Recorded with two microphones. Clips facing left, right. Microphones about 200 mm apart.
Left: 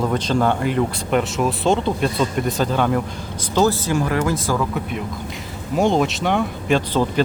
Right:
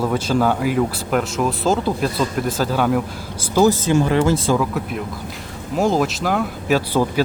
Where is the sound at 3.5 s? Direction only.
15° right (ahead or behind).